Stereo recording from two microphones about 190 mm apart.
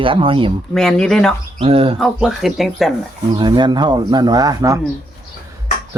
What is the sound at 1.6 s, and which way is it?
Speech, 30° right (ahead or behind).